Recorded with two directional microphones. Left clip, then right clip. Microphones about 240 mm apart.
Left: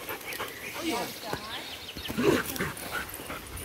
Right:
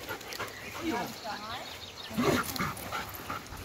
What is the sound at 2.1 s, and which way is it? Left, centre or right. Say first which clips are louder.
Dog: left 3 dB; right.